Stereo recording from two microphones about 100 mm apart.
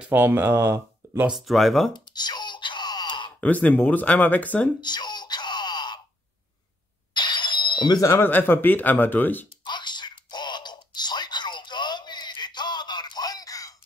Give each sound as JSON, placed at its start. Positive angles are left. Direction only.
{"t": 0.0, "sound": "speech", "side_deg": -20}
{"t": 1.3, "sound": "speech", "side_deg": 0}
{"t": 2.0, "sound": "a sound", "side_deg": 45}
{"t": 3.3, "sound": "speech", "side_deg": 15}
{"t": 4.8, "sound": "wail", "side_deg": 45}
{"t": 7.2, "sound": "music", "side_deg": 45}
{"t": 8.0, "sound": "speech", "side_deg": 25}
{"t": 9.7, "sound": "typing", "side_deg": 50}